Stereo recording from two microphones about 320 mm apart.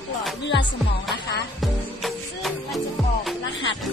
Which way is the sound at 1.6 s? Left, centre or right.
Centre.